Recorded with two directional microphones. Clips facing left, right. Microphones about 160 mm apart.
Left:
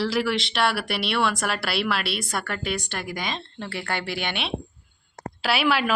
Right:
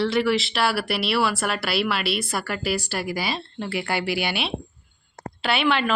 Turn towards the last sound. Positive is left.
turn(degrees=5)  # may be behind; listen again after turning